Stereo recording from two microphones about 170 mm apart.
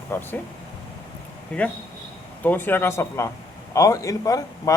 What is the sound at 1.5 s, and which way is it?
A man's voice, 5° left (ahead or behind).